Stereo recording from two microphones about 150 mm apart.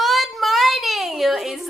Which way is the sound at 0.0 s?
Centre (ahead or behind).